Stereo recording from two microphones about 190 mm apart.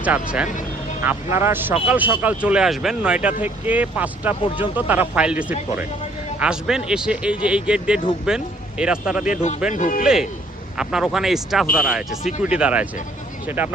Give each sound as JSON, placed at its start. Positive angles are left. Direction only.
{"t": 0.0, "sound": "a man's voice", "side_deg": -5}
{"t": 9.2, "sound": "speech", "side_deg": 40}
{"t": 10.8, "sound": "a man's voice", "side_deg": -5}